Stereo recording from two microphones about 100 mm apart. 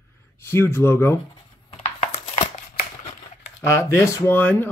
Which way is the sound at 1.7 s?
90° left.